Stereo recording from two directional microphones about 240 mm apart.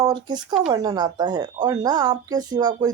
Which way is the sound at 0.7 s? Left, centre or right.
Centre.